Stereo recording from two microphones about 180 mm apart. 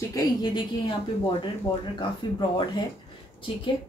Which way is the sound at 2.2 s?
25° left (ahead or behind).